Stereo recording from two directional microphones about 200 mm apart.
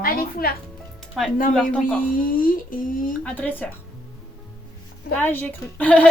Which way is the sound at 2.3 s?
45° left (ahead or behind).